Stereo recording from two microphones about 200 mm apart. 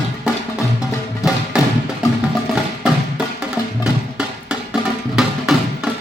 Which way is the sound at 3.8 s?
5° right (ahead or behind).